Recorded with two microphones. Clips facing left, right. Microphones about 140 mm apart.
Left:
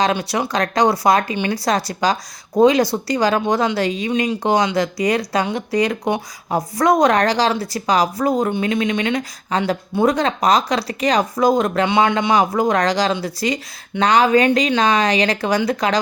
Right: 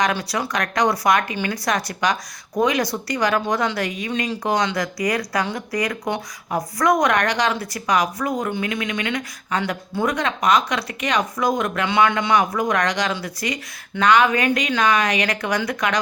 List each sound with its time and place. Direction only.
0.0 s speech: 25° left (ahead or behind)